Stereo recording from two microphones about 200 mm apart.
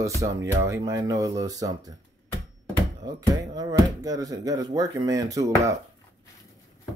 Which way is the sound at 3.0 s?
20° right (ahead or behind).